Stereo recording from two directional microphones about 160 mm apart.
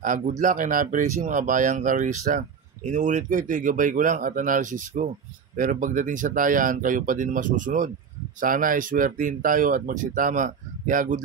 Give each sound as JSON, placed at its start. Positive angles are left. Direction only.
{"t": 0.0, "sound": "speech", "side_deg": -50}